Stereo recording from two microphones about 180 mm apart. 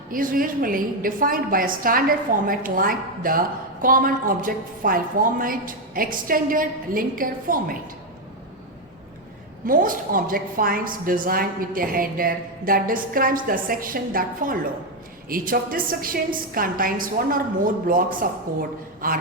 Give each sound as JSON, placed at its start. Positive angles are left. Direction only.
{"t": 0.1, "sound": "a woman's voice", "side_deg": -50}
{"t": 9.6, "sound": "a woman's voice", "side_deg": -50}